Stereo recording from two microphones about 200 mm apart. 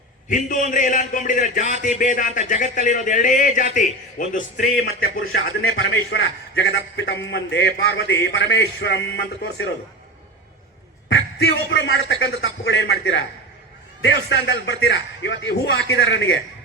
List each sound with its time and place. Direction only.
0.3 s speech: 40° left (ahead or behind)
5.6 s a man's voice: 70° left (ahead or behind)
11.1 s a man's voice: 60° left (ahead or behind)